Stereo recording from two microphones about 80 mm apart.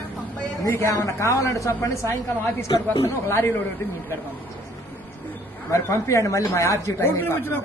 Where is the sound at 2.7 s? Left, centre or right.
Left.